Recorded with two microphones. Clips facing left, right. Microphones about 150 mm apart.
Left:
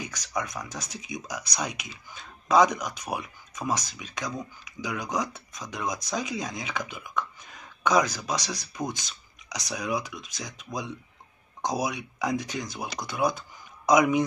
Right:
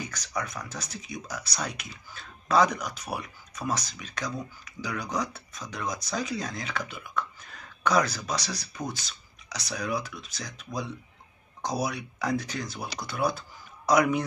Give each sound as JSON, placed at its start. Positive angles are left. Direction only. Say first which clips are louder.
{"t": 0.0, "sound": "speech", "louder": "left 1 dB", "side_deg": 10}